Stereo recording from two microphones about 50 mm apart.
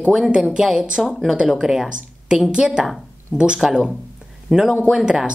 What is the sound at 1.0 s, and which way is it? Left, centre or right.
Speech, centre.